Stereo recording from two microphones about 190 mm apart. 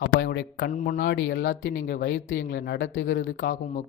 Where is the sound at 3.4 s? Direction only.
50° left (ahead or behind).